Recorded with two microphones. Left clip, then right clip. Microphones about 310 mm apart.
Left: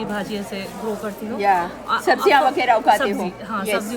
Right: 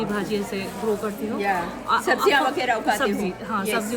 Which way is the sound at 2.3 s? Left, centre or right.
Left.